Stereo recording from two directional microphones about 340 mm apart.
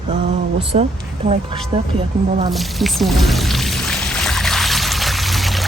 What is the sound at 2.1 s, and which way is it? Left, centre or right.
Speech, centre.